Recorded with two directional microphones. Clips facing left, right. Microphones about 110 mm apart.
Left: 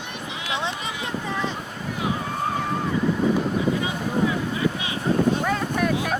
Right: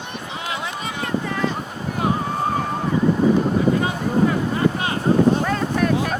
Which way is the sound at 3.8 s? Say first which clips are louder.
Right 4 dB; 50° right (ahead or behind).